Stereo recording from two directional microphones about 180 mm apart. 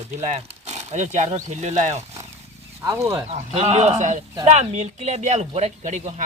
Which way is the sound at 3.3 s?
35° right (ahead or behind).